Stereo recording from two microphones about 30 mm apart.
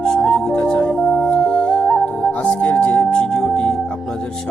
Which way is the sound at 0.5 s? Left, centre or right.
Left.